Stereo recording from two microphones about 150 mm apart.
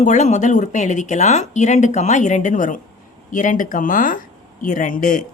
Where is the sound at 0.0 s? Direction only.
55° left (ahead or behind).